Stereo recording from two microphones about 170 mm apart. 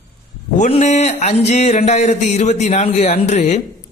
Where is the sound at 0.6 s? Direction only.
40° left (ahead or behind).